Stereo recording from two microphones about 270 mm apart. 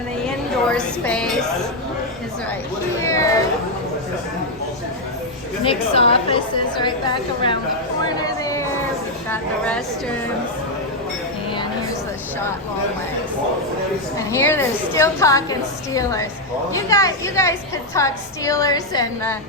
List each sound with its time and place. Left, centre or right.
0.3 s a sound: centre
3.0 s a woman's voice: centre
5.6 s a woman's voice: left
9.3 s a woman's voice: centre
14.3 s a woman's voice: centre
16.7 s a woman's voice: centre